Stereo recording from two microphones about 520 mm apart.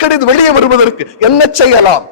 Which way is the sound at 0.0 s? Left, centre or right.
Left.